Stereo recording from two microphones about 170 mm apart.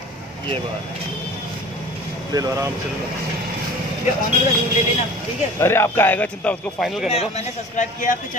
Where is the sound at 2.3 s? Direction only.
20° right (ahead or behind).